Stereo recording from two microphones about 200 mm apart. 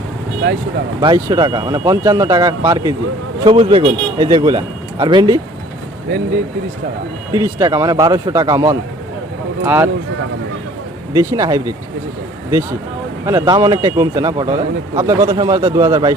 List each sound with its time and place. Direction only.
1.0 s a man's voice: 20° right (ahead or behind)
7.3 s a man's voice: 15° right (ahead or behind)
11.1 s a man's voice: 15° right (ahead or behind)
13.2 s a man's voice: 20° right (ahead or behind)